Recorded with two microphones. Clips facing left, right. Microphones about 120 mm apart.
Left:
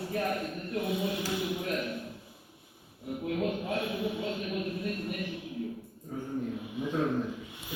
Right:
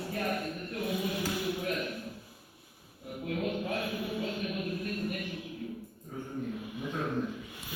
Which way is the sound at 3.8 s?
25° left (ahead or behind).